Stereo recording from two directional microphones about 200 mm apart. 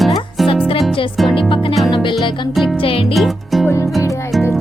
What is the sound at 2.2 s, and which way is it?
Speech, 25° left (ahead or behind).